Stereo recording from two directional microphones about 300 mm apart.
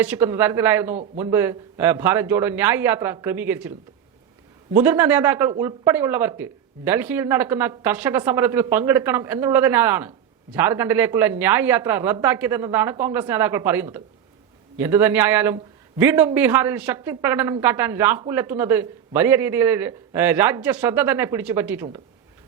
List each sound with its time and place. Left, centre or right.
0.0 s a man's voice: centre